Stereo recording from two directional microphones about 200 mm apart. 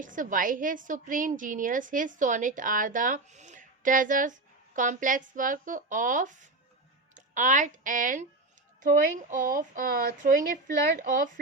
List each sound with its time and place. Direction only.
0.0 s a woman's voice: 40° right (ahead or behind)